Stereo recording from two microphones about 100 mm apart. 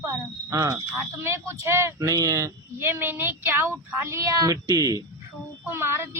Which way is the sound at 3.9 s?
30° right (ahead or behind).